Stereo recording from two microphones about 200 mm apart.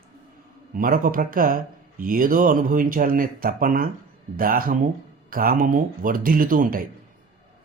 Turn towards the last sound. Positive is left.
turn(degrees=-45)  # may be behind; listen again after turning